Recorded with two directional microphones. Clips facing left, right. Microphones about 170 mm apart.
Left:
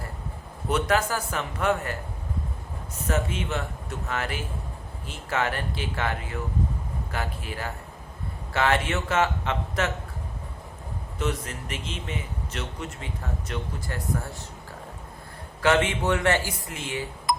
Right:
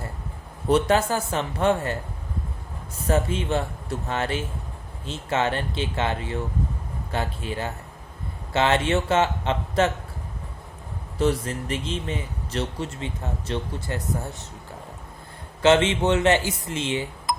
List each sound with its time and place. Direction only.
0.7 s a man's voice: 25° right (ahead or behind)
3.1 s a man's voice: 30° right (ahead or behind)
11.2 s a man's voice: 35° right (ahead or behind)
15.6 s a man's voice: 25° right (ahead or behind)